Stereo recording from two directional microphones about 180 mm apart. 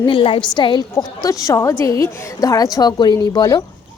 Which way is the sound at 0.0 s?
30° left (ahead or behind).